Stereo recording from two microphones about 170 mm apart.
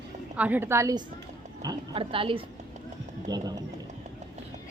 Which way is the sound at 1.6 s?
30° right (ahead or behind).